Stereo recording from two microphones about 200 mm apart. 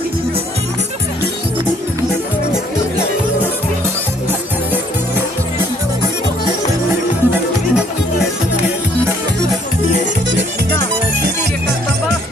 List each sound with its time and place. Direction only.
7.3 s music: 5° right (ahead or behind)